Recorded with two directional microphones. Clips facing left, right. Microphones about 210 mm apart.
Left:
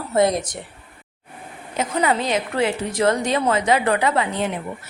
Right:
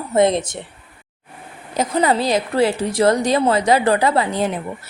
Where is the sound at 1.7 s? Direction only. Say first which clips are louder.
Right 3 dB; 35° right (ahead or behind).